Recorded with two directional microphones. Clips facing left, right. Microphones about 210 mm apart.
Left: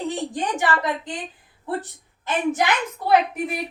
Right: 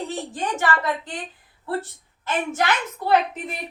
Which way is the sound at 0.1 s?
15° left (ahead or behind).